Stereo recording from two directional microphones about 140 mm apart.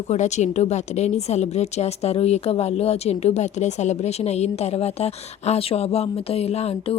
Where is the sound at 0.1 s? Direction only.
55° left (ahead or behind).